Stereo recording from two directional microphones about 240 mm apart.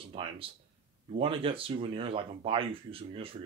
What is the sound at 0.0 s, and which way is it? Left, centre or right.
Speech, right.